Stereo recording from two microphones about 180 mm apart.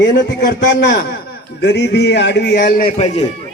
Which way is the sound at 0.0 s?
75° left (ahead or behind).